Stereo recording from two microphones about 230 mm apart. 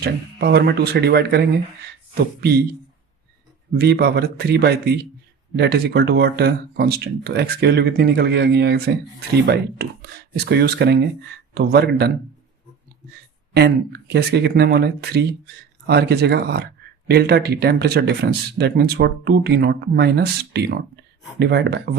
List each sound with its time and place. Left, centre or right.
0.0 s speech: right
3.8 s speech: right
13.5 s speech: right